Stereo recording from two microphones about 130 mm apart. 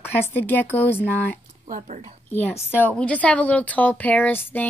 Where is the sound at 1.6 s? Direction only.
65° right (ahead or behind).